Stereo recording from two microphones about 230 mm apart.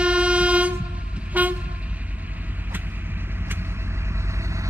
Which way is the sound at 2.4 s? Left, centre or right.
Centre.